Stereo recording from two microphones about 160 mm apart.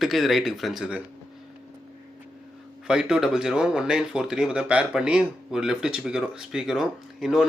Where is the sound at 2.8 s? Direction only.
5° right (ahead or behind).